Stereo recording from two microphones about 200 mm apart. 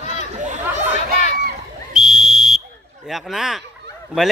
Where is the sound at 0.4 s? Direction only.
35° right (ahead or behind).